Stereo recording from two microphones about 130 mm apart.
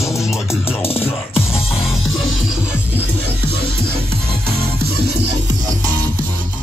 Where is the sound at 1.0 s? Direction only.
50° left (ahead or behind).